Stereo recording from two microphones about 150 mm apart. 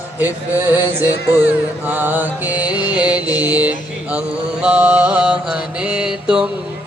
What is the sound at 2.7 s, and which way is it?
Music, 25° left (ahead or behind).